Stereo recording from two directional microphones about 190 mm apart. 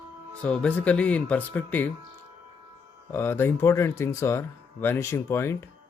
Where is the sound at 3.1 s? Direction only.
10° left (ahead or behind).